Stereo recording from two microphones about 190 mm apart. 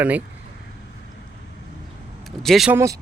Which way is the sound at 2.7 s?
15° right (ahead or behind).